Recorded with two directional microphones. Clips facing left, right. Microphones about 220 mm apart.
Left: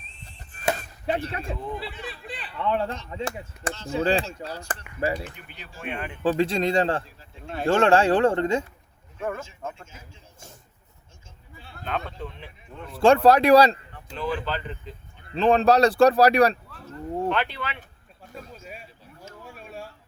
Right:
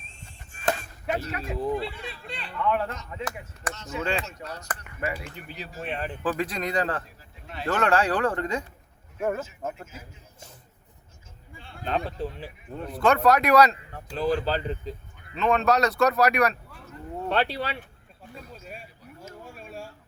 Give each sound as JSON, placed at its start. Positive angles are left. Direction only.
{"t": 0.8, "sound": "chop", "side_deg": 30}
{"t": 1.5, "sound": "speech", "side_deg": -35}
{"t": 1.8, "sound": "a sound", "side_deg": 5}
{"t": 2.6, "sound": "speech", "side_deg": 30}
{"t": 5.5, "sound": "speech", "side_deg": -35}
{"t": 6.2, "sound": "speech", "side_deg": 25}
{"t": 9.7, "sound": "speech", "side_deg": 25}
{"t": 11.9, "sound": "speech", "side_deg": -35}
{"t": 13.0, "sound": "speech", "side_deg": 30}
{"t": 14.2, "sound": "speech", "side_deg": -35}
{"t": 15.3, "sound": "speech", "side_deg": 30}
{"t": 17.2, "sound": "speech", "side_deg": -35}
{"t": 19.5, "sound": "a sound", "side_deg": 0}